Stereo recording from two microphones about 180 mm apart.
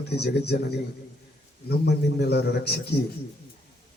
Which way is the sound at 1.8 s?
65° left (ahead or behind).